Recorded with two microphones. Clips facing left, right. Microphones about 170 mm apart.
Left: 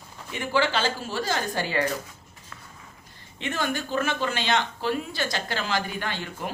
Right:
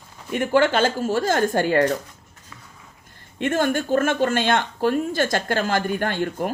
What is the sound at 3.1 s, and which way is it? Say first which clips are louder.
Speech: right 8 dB; 50° right (ahead or behind).